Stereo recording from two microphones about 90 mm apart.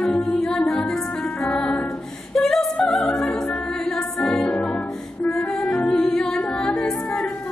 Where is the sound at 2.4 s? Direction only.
5° left (ahead or behind).